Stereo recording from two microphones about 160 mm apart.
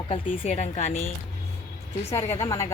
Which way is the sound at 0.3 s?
45° left (ahead or behind).